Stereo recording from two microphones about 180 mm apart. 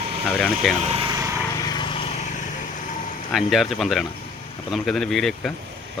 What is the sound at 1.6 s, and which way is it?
Vehicle, 25° left (ahead or behind).